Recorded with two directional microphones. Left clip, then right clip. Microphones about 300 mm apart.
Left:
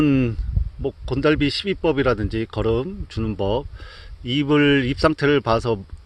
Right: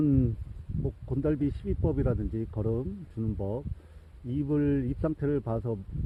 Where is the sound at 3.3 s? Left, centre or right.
Left.